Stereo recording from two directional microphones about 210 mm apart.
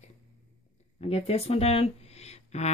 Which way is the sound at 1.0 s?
30° left (ahead or behind).